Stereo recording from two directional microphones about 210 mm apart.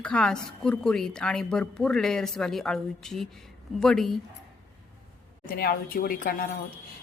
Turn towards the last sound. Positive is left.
turn(degrees=45)  # may be behind; listen again after turning